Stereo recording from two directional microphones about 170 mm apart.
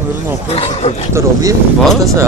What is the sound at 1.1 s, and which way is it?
Speech, 20° right (ahead or behind).